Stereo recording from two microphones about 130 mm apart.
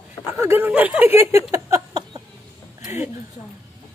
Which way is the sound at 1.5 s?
25° right (ahead or behind).